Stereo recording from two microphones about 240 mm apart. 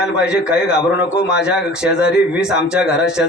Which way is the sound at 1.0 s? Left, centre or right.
Left.